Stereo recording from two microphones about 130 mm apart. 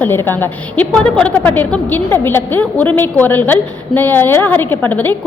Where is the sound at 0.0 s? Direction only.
15° left (ahead or behind).